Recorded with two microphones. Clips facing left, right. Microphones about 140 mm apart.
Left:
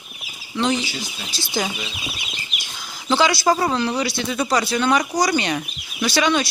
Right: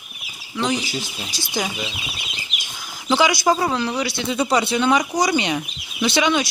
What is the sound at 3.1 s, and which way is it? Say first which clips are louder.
Speech: even; 15° right (ahead or behind).